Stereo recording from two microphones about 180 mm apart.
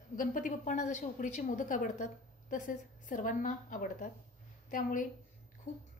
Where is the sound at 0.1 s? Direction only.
50° left (ahead or behind).